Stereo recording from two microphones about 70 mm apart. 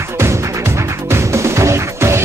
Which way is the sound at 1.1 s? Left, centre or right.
Right.